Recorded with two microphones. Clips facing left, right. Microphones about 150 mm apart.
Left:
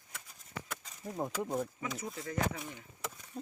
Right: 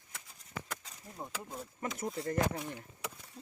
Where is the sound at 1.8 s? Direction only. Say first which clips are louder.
Right 3 dB; 55° right (ahead or behind).